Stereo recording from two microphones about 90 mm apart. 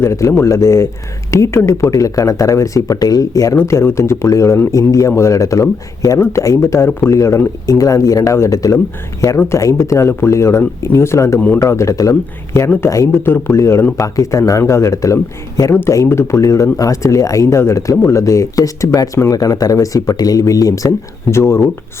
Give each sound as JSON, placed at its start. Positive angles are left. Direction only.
{"t": 0.0, "sound": "speech", "side_deg": 35}
{"t": 11.3, "sound": "speech", "side_deg": 15}
{"t": 11.6, "sound": "speech", "side_deg": 35}
{"t": 13.2, "sound": "speech", "side_deg": 25}